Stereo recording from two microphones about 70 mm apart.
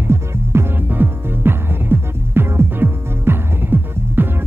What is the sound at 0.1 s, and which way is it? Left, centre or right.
Music, right.